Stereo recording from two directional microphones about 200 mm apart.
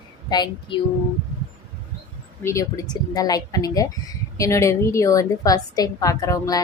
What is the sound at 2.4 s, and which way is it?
A woman's voice, 15° left (ahead or behind).